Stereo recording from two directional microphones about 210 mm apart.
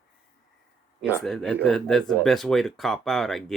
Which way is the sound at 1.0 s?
Centre (ahead or behind).